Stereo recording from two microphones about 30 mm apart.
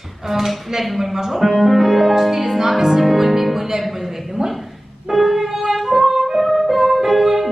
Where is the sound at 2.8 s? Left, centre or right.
Centre.